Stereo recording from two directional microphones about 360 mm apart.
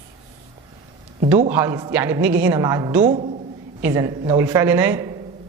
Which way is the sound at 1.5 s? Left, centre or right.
Centre.